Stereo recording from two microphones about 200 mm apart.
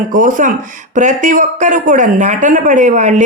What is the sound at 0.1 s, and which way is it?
Speech, 40° right (ahead or behind).